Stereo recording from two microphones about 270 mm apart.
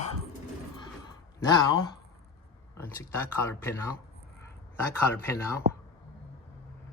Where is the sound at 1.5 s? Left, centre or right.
Centre.